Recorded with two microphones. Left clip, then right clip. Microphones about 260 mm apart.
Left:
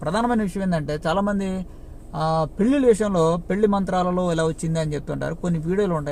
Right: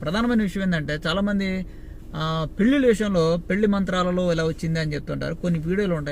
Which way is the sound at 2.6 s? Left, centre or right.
Left.